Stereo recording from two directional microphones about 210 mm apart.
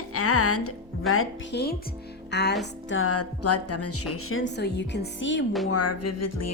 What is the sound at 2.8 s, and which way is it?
Music, 80° left.